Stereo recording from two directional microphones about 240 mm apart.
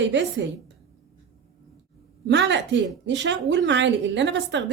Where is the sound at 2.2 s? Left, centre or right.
Right.